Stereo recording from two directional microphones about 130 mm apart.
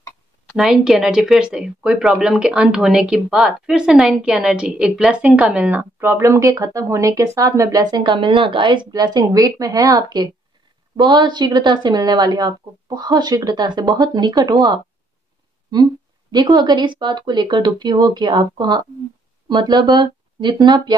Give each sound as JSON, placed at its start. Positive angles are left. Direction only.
{"t": 0.6, "sound": "a woman's voice", "side_deg": -5}